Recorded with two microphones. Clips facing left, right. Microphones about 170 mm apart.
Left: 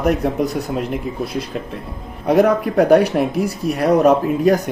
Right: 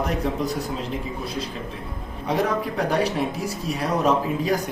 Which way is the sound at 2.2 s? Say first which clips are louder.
Left 9 dB; 65° left (ahead or behind).